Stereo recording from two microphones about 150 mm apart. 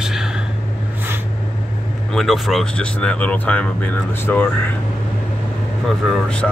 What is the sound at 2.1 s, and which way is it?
Speech, centre (ahead or behind).